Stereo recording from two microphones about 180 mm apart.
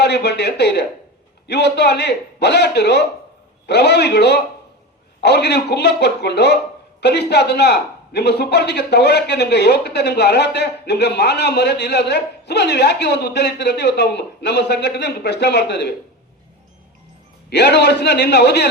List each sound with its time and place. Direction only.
0.0 s a man's voice: 65° left (ahead or behind)
17.5 s a man's voice: 70° left (ahead or behind)